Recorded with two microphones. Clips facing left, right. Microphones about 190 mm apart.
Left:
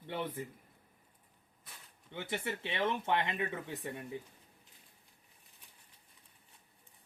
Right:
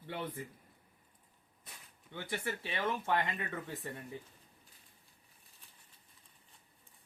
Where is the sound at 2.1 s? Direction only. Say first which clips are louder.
Left 1 dB; 25° left (ahead or behind).